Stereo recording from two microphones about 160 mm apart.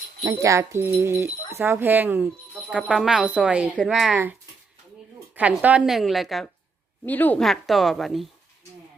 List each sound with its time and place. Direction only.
0.3 s a woman's voice: 20° right (ahead or behind)
5.3 s a woman's voice: 10° right (ahead or behind)
7.0 s a woman's voice: 10° left (ahead or behind)